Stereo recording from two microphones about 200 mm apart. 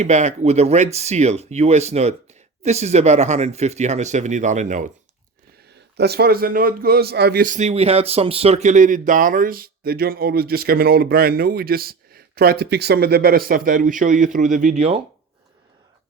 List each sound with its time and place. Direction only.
0.0 s speech: 35° right (ahead or behind)
6.0 s speech: 55° right (ahead or behind); by 15.0 s 30° right (ahead or behind)